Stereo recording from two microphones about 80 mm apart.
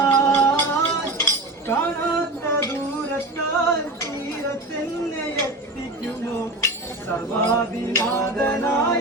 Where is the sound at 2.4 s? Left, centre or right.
Left.